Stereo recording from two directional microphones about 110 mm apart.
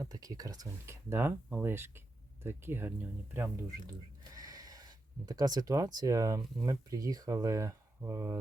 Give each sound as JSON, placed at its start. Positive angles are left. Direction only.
{"t": 0.0, "sound": "speech", "side_deg": -35}
{"t": 1.1, "sound": "speech", "side_deg": -20}
{"t": 4.4, "sound": "a sound", "side_deg": -35}
{"t": 5.2, "sound": "speech", "side_deg": -35}